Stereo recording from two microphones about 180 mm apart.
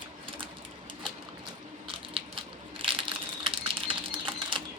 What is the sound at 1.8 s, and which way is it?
Crushing, 30° right (ahead or behind).